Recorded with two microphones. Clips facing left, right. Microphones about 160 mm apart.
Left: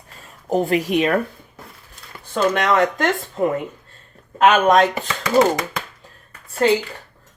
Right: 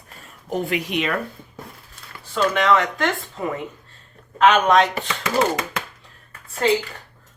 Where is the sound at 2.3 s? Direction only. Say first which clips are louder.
Left 1 dB; 45° left (ahead or behind).